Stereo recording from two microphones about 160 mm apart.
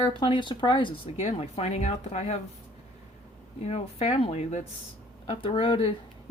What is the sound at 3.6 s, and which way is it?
Speech, 40° left (ahead or behind).